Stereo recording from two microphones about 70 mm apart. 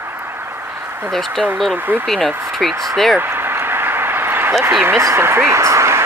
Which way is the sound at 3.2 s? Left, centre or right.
Right.